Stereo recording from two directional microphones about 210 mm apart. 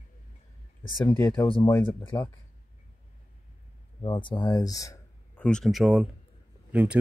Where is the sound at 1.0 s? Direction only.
10° left (ahead or behind).